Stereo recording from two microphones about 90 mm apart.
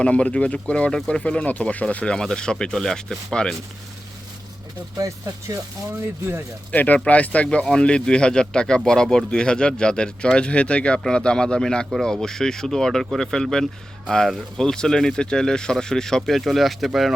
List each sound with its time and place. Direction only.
0.0 s speech: 15° left (ahead or behind)
4.9 s speech: 40° right (ahead or behind)
6.7 s speech: 15° left (ahead or behind); by 17.1 s centre (ahead or behind)